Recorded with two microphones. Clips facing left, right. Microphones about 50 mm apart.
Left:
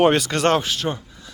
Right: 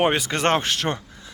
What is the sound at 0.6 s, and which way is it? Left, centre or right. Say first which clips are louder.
Speech: even; right.